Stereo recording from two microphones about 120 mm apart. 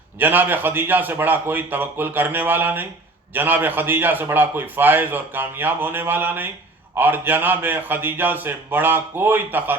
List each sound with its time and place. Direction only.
0.2 s a man's voice: 15° right (ahead or behind)